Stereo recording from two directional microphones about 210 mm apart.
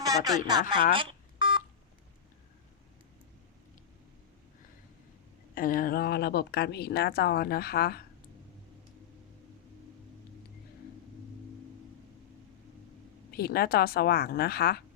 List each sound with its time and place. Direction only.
0.0 s speech: 15° right (ahead or behind)
0.9 s telephone dialing: 25° right (ahead or behind)
5.5 s a woman's voice: 40° left (ahead or behind)
13.3 s a woman's voice: 45° left (ahead or behind)